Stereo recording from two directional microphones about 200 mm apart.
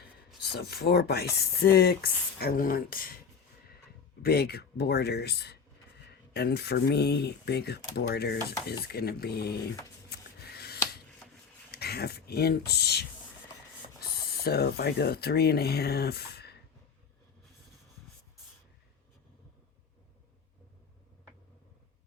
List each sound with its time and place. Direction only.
0.5 s speech: 55° left (ahead or behind)
4.2 s speech: 50° left (ahead or behind)
10.1 s rub: 55° left (ahead or behind)
11.7 s speech: 50° left (ahead or behind)
14.4 s speech: 50° left (ahead or behind)